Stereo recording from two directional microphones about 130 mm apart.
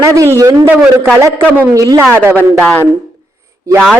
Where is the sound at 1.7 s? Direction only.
25° right (ahead or behind).